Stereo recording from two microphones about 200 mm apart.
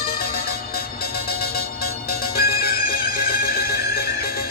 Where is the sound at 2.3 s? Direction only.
50° left (ahead or behind).